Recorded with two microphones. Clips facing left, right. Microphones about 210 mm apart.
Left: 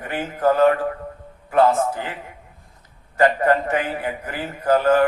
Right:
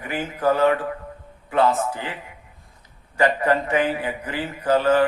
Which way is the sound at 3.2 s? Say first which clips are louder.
Left 2 dB; 50° left (ahead or behind).